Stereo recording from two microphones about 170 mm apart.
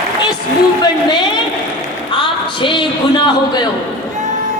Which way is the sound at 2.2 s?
30° left (ahead or behind).